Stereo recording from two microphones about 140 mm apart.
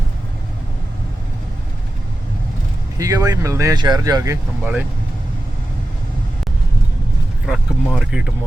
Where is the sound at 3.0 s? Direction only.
25° right (ahead or behind).